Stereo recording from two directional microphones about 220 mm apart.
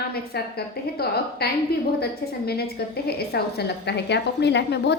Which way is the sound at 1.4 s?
45° left (ahead or behind).